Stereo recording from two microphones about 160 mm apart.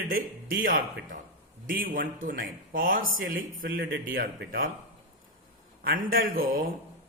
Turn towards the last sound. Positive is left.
turn(degrees=-65)  # may be behind; listen again after turning